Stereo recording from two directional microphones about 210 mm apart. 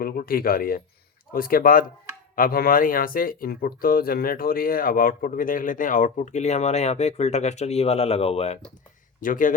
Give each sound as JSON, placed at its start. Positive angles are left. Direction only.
{"t": 0.0, "sound": "speech", "side_deg": 45}
{"t": 9.2, "sound": "speech", "side_deg": 40}